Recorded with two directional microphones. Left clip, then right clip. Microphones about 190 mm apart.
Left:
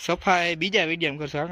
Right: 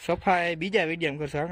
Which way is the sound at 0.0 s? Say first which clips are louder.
Left 2 dB; centre (ahead or behind).